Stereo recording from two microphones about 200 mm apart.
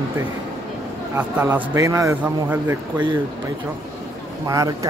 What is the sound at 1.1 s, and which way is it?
A man's voice, 10° right (ahead or behind).